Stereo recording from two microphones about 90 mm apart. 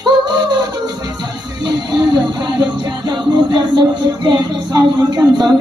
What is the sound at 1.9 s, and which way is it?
Music, 55° right (ahead or behind).